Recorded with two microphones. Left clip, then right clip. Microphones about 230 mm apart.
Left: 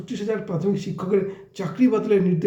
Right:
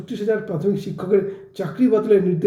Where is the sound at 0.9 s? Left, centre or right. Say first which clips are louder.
Right 5 dB; centre.